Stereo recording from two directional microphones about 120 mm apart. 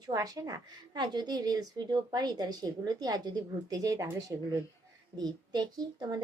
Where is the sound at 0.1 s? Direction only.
30° right (ahead or behind).